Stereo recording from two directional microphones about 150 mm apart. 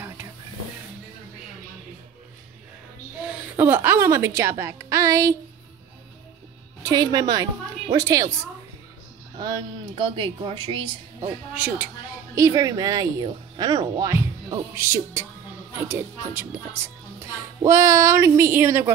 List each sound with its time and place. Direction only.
3.3 s a woman's voice: 15° right (ahead or behind)
6.8 s speech: 25° right (ahead or behind)
9.4 s speech: 30° right (ahead or behind)
11.5 s a sound: 10° right (ahead or behind)
12.4 s speech: 20° right (ahead or behind)
17.6 s a sound: 20° right (ahead or behind)